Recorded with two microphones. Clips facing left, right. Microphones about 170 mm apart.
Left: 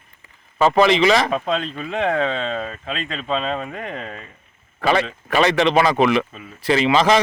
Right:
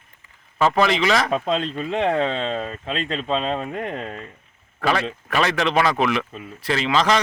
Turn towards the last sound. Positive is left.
turn(degrees=10)  # may be behind; listen again after turning